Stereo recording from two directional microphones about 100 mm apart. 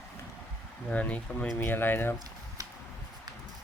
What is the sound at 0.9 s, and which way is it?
Speech, 15° left (ahead or behind).